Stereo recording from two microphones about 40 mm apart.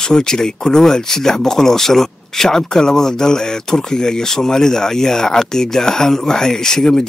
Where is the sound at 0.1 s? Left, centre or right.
Centre.